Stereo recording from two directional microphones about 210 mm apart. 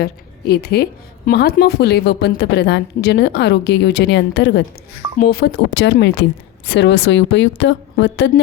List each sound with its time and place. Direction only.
0.0 s a woman's voice: 50° left (ahead or behind)